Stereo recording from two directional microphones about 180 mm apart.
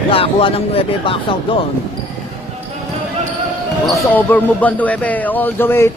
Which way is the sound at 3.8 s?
5° left (ahead or behind).